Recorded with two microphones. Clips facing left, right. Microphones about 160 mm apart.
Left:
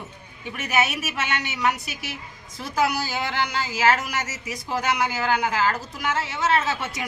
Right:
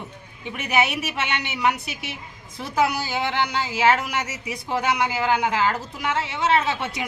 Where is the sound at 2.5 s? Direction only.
25° right (ahead or behind).